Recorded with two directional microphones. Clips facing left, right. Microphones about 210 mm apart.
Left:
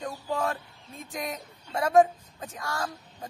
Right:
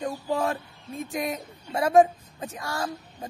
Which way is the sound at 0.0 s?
15° right (ahead or behind).